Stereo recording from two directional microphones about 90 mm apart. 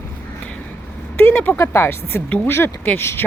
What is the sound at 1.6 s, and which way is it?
Speech, 25° left (ahead or behind).